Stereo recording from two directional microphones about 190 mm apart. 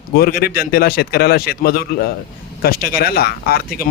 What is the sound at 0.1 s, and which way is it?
A man's voice, 55° left (ahead or behind).